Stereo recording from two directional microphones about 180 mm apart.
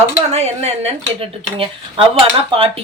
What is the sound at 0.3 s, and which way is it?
Speech, 35° right (ahead or behind).